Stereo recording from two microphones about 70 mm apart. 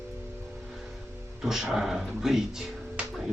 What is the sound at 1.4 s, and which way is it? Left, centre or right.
Speech, centre.